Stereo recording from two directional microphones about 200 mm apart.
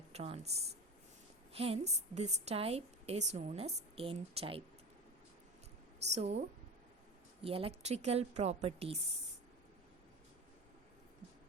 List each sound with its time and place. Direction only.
0.1 s a woman's voice: 30° right (ahead or behind)
6.1 s a woman's voice: 35° right (ahead or behind)
7.4 s a woman's voice: 30° right (ahead or behind)